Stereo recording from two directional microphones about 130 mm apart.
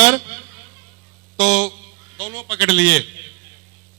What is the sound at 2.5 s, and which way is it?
Speech, 25° right (ahead or behind).